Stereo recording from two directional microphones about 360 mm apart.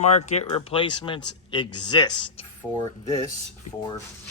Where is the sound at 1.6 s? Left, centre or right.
Left.